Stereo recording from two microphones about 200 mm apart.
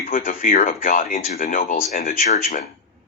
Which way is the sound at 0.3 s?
40° left (ahead or behind).